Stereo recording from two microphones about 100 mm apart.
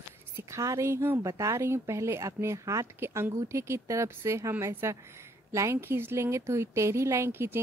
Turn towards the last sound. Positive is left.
turn(degrees=-20)  # may be behind; listen again after turning